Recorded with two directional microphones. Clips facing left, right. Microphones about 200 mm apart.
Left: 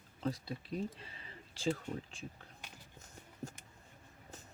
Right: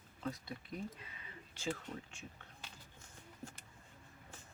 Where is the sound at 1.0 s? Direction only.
30° left (ahead or behind).